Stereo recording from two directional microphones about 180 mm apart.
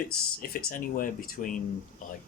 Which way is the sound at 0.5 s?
50° left (ahead or behind).